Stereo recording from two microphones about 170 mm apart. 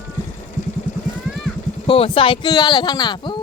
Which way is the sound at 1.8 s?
35° left (ahead or behind).